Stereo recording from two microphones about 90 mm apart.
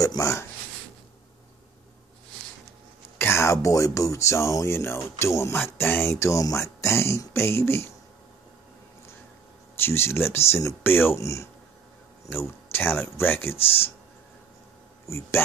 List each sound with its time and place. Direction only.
0.0 s a sound: 40° left (ahead or behind)
3.2 s speech: 30° left (ahead or behind)
9.8 s speech: 25° left (ahead or behind)
12.7 s speech: 25° left (ahead or behind)
15.0 s speech: 30° left (ahead or behind)